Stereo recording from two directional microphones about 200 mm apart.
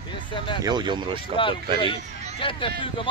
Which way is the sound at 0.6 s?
20° right (ahead or behind).